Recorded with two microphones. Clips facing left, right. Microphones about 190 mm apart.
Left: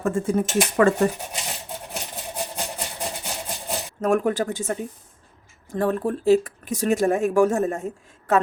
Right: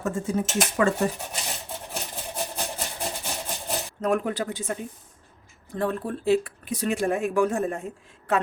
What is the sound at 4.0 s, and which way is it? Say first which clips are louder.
Speech: left 5 dB; 45° left (ahead or behind).